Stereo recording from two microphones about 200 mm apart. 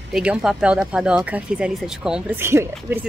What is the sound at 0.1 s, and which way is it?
A woman's voice, 5° right (ahead or behind).